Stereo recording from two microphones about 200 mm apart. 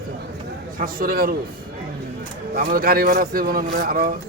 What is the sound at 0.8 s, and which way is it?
Speech, 50° right (ahead or behind).